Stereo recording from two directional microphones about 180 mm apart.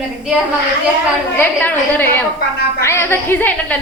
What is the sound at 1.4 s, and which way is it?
A woman's voice, 10° left (ahead or behind).